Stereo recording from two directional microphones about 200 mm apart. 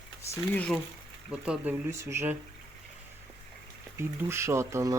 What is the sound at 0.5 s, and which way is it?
Speech, 5° left (ahead or behind).